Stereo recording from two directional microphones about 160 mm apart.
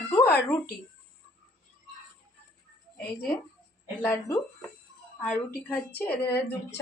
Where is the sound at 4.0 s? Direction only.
15° left (ahead or behind).